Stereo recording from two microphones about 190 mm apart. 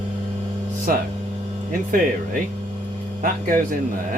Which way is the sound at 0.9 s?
50° right (ahead or behind).